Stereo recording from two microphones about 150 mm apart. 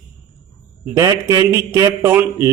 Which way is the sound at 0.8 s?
20° right (ahead or behind).